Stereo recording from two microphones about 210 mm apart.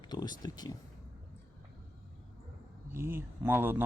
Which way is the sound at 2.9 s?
10° right (ahead or behind).